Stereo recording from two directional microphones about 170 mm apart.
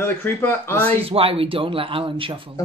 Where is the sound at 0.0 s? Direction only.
15° left (ahead or behind).